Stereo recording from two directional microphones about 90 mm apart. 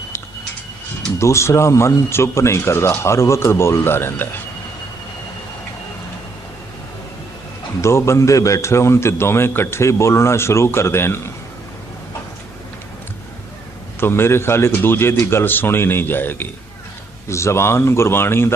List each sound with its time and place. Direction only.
1.2 s a man's voice: 30° left (ahead or behind)
7.8 s a man's voice: 30° left (ahead or behind)
14.0 s a man's voice: 25° left (ahead or behind)